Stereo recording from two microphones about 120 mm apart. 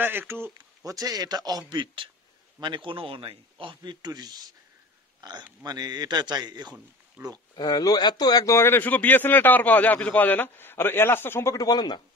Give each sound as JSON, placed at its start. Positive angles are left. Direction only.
{"t": 0.0, "sound": "speech", "side_deg": -15}
{"t": 0.6, "sound": "a man's voice", "side_deg": -30}
{"t": 5.6, "sound": "a man's voice", "side_deg": -35}
{"t": 7.5, "sound": "a man's voice", "side_deg": 35}
{"t": 11.5, "sound": "speech", "side_deg": 35}